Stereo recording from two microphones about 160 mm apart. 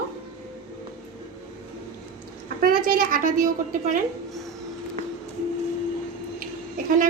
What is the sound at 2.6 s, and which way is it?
A woman's voice, 65° right (ahead or behind).